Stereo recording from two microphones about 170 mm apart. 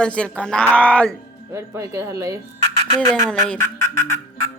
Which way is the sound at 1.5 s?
20° right (ahead or behind).